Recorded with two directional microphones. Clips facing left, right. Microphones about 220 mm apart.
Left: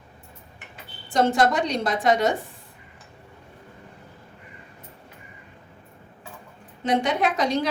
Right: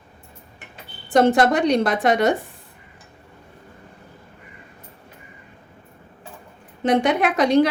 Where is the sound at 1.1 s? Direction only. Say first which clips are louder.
Right 5 dB; 60° right (ahead or behind).